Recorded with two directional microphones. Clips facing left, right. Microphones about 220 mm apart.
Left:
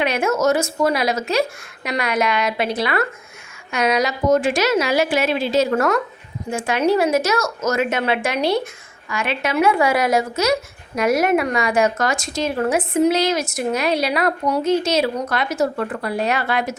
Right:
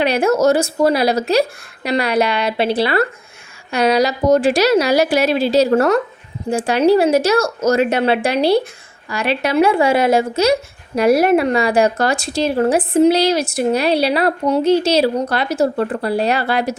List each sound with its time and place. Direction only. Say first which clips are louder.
0.0 s speech: right 4 dB; 35° right (ahead or behind)